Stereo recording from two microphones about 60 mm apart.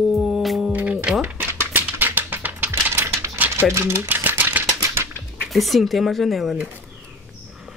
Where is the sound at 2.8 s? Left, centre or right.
Right.